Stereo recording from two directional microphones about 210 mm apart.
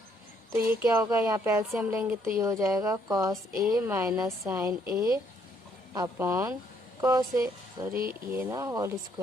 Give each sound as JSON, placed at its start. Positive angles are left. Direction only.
{"t": 0.5, "sound": "speech", "side_deg": -10}
{"t": 3.5, "sound": "speech", "side_deg": -40}
{"t": 3.8, "sound": "speech", "side_deg": -15}
{"t": 4.9, "sound": "speech", "side_deg": -45}
{"t": 5.9, "sound": "speech", "side_deg": -15}
{"t": 7.9, "sound": "speech", "side_deg": -45}
{"t": 8.4, "sound": "speech", "side_deg": -15}